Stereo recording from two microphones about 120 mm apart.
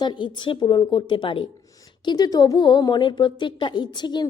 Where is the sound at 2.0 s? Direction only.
35° left (ahead or behind).